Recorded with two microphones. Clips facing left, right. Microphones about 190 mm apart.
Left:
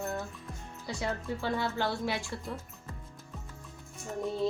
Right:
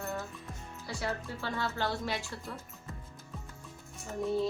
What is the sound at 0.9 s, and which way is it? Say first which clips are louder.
A woman's voice: left 2 dB; 15° left (ahead or behind).